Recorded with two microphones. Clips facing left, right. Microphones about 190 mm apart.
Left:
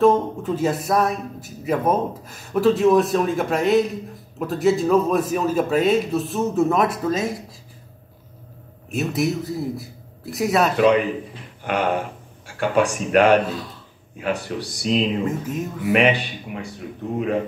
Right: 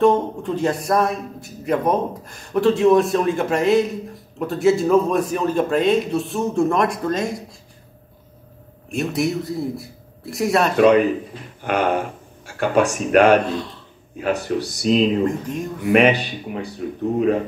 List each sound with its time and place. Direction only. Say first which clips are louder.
0.0 s speech: even; centre (ahead or behind)
8.9 s speech: right 1 dB; centre (ahead or behind)
10.8 s a man's voice: right 3 dB; 45° right (ahead or behind)
15.2 s speech: right 2 dB; 5° left (ahead or behind)
15.9 s speech: right 3 dB; 40° right (ahead or behind)